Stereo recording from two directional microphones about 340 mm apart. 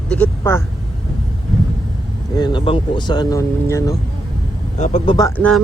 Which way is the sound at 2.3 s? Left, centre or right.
Centre.